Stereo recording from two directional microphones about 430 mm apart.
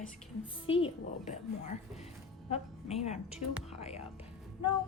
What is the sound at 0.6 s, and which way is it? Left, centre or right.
Speech, centre.